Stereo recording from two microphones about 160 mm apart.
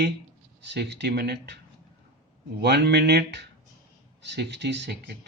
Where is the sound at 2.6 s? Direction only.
90° right.